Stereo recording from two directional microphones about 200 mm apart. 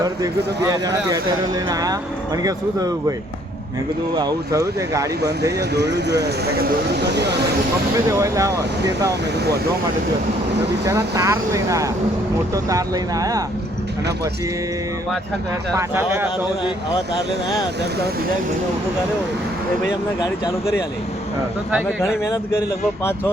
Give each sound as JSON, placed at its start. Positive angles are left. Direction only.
{"t": 2.4, "sound": "speech", "side_deg": -20}
{"t": 4.1, "sound": "speech", "side_deg": -20}
{"t": 5.2, "sound": "speech", "side_deg": -55}
{"t": 8.2, "sound": "speech", "side_deg": -15}
{"t": 10.8, "sound": "speech", "side_deg": -15}
{"t": 15.7, "sound": "speech", "side_deg": -10}